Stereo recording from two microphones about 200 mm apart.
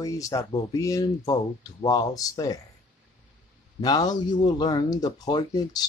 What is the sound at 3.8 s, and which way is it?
Speech, 20° left (ahead or behind).